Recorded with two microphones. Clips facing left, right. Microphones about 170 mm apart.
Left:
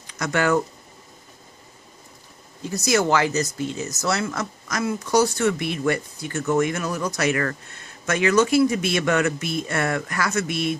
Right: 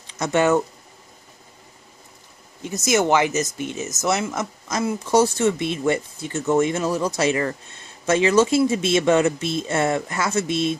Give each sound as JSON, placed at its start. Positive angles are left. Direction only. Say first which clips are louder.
{"t": 0.0, "sound": "speech", "louder": "right 3 dB", "side_deg": -25}
{"t": 2.6, "sound": "speech", "louder": "right 1 dB", "side_deg": -20}